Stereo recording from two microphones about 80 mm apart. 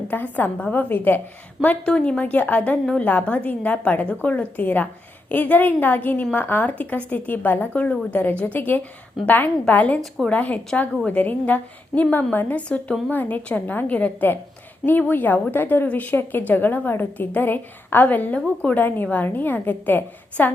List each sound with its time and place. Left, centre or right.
0.1 s a woman's voice: left